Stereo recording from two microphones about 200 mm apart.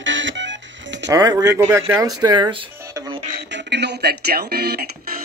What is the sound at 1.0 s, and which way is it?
Speech, 20° right (ahead or behind).